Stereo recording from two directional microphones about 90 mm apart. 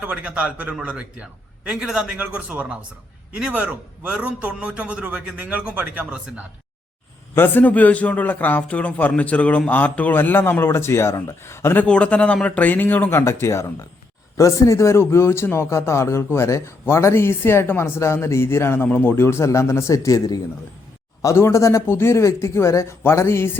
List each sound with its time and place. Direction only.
0.0 s a man's voice: 15° right (ahead or behind)
7.3 s a man's voice: 20° left (ahead or behind)
11.9 s a man's voice: 15° left (ahead or behind); by 23.5 s 30° left (ahead or behind)